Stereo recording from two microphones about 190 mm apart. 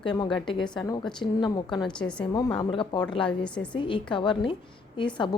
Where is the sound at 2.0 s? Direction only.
5° left (ahead or behind).